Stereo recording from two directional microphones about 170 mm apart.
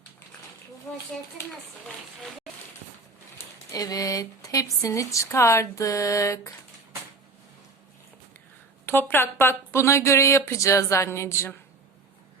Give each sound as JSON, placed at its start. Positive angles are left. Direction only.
{"t": 3.7, "sound": "speech", "side_deg": 20}
{"t": 8.9, "sound": "speech", "side_deg": 10}